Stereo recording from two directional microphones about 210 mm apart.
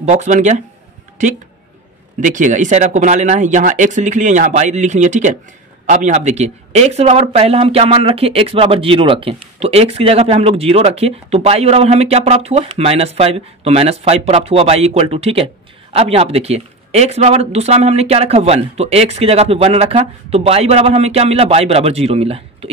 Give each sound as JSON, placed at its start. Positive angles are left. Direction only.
{"t": 0.0, "sound": "speech", "side_deg": -35}
{"t": 2.1, "sound": "speech", "side_deg": -35}